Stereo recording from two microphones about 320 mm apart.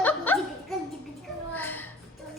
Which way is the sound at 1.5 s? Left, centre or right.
Centre.